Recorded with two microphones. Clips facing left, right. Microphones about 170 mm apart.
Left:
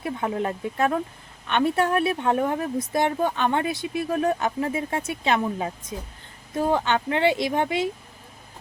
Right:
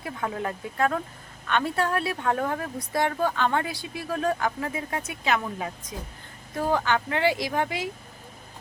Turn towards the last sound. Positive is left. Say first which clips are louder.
# left 4 dB
turn(degrees=25)  # may be behind; listen again after turning